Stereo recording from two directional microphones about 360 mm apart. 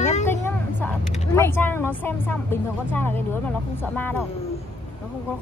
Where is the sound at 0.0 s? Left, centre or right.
Centre.